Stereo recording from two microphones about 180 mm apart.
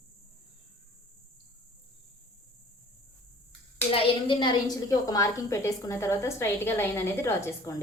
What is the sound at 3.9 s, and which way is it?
A woman's voice, 30° left (ahead or behind).